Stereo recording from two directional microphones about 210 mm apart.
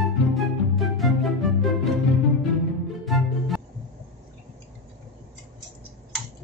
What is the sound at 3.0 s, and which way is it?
Music, centre (ahead or behind).